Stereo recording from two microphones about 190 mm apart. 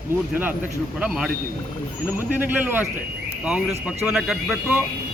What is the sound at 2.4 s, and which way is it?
A man's voice, 10° right (ahead or behind).